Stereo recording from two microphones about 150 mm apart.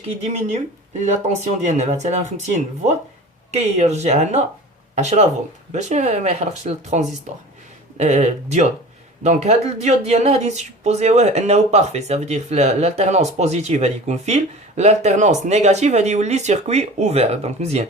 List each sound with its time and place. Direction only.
0.3 s speech: 50° right (ahead or behind)
3.5 s speech: 45° right (ahead or behind)